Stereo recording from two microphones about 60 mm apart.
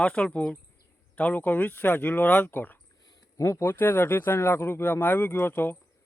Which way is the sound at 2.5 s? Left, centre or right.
Left.